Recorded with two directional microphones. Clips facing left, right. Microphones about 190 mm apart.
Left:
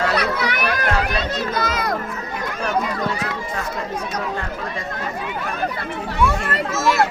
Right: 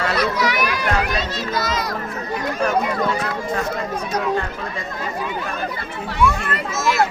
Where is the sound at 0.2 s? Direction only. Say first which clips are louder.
Right 2 dB; 60° left (ahead or behind).